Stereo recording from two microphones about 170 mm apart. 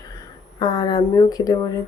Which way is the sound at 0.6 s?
25° left (ahead or behind).